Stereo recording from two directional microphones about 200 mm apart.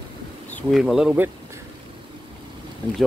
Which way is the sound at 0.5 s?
5° left (ahead or behind).